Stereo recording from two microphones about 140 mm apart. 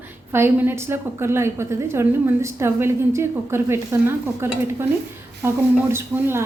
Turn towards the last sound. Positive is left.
turn(degrees=-15)  # may be behind; listen again after turning